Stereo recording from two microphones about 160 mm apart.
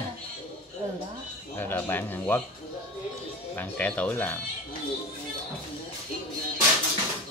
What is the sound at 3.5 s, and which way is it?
Speech, 10° left (ahead or behind).